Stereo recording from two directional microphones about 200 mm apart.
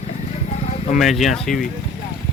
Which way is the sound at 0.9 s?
Centre (ahead or behind).